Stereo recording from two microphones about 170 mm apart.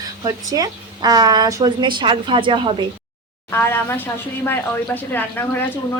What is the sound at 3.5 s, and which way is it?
Speech, 15° left (ahead or behind).